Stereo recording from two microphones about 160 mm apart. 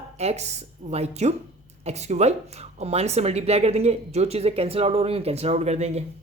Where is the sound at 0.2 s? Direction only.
45° right (ahead or behind).